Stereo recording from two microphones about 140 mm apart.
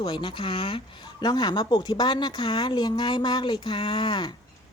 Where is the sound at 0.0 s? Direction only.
35° left (ahead or behind).